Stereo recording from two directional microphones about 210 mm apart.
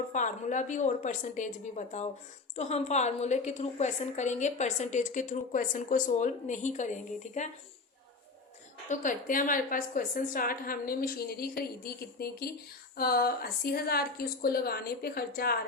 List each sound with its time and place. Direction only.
0.1 s a woman's voice: 35° left (ahead or behind)
8.9 s a woman's voice: 40° left (ahead or behind)